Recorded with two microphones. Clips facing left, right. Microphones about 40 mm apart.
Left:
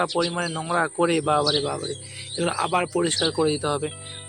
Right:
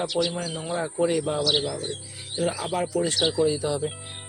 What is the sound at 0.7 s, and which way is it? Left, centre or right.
Speech, left.